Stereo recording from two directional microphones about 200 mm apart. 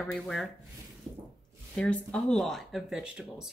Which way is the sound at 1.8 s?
5° left (ahead or behind).